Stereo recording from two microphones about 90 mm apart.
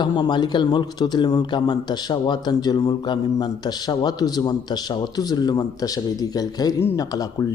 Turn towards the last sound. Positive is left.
turn(degrees=45)  # may be behind; listen again after turning